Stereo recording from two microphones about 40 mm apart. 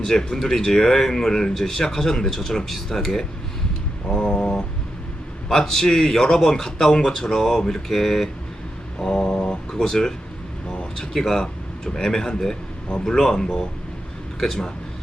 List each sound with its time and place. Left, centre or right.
0.0 s speech: centre
4.1 s mantra: left
5.5 s speech: centre
9.4 s speech: left
10.7 s a sound: left
11.1 s speech: centre